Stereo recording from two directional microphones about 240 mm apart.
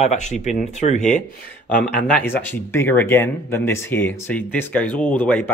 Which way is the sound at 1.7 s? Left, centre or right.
Centre.